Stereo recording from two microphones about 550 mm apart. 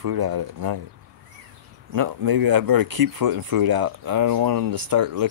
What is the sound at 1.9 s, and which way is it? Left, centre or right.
Speech, right.